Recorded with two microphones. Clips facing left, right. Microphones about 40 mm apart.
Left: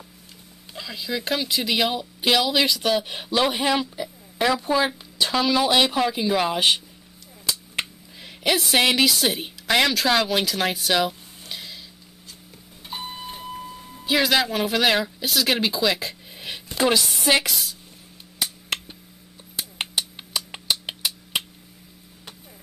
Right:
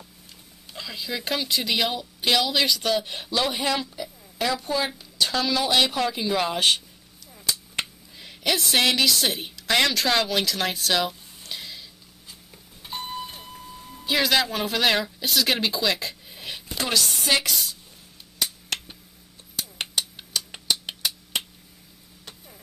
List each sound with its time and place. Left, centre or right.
0.7 s speech: centre
7.4 s cap gun: centre
8.8 s speech: centre
12.8 s a sound: centre
13.8 s speech: centre
16.7 s chopping: centre
17.3 s speech: centre
19.5 s a sound: centre